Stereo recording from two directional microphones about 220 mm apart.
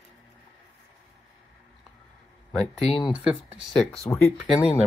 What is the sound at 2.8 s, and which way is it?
Speech, 25° left (ahead or behind).